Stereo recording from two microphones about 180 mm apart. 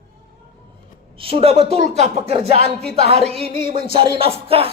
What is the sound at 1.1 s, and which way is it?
Speech, 30° right (ahead or behind).